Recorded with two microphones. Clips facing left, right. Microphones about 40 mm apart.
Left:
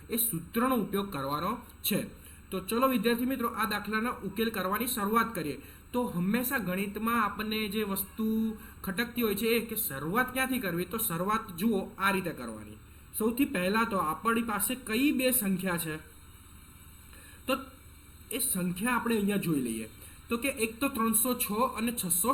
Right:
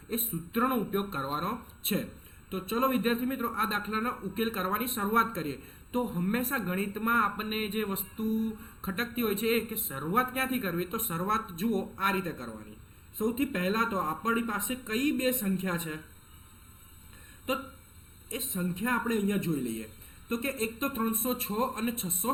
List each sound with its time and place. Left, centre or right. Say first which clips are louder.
0.1 s a man's voice: even; centre
17.5 s speech: left 1 dB; centre
18.3 s a man's voice: even; centre